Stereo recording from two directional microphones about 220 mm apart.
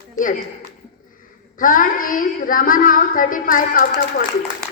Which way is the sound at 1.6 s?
40° left (ahead or behind).